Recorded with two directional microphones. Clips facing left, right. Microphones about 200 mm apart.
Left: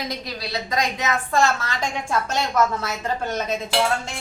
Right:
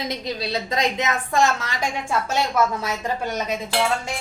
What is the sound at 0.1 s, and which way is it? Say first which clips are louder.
A woman's voice: right 3 dB; 25° right (ahead or behind).